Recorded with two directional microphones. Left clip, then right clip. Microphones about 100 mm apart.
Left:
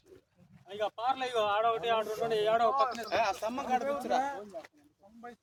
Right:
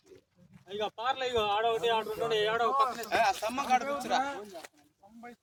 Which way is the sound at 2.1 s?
40° left (ahead or behind).